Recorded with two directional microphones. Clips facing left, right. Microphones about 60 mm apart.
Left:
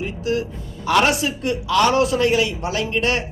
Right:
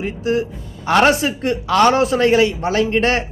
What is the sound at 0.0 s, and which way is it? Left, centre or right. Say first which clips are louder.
A man's voice: right 3 dB; right.